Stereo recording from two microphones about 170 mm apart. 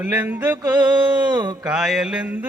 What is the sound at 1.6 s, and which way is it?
Mantra, 5° right (ahead or behind).